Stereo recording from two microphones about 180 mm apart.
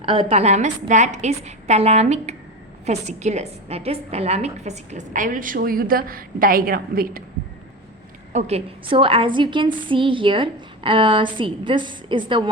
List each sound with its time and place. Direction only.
0.0 s a woman's voice: 35° right (ahead or behind); by 7.2 s 55° right (ahead or behind)
8.3 s a woman's voice: 35° right (ahead or behind)